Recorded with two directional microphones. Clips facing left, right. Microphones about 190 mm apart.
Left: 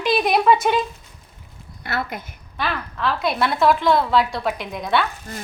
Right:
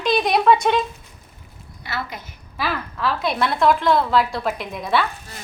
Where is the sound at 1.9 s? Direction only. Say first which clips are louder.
Left 3 dB; 55° left (ahead or behind).